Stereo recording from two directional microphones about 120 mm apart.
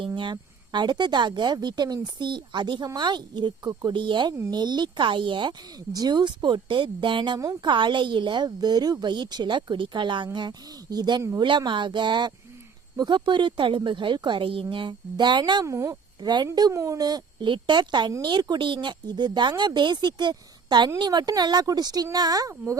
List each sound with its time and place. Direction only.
0.2 s speech: 40° right (ahead or behind)
15.6 s speech: 25° right (ahead or behind)